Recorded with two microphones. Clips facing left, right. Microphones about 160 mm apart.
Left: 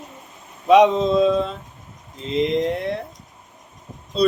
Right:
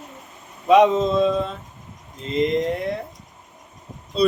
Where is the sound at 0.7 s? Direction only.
Centre (ahead or behind).